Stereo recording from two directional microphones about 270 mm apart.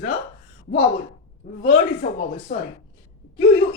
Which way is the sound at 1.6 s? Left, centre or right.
Left.